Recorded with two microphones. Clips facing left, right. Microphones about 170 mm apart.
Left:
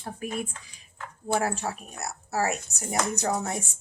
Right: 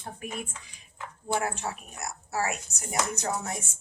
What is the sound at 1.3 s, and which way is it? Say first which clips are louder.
A woman's voice: left 3 dB; 40° left (ahead or behind).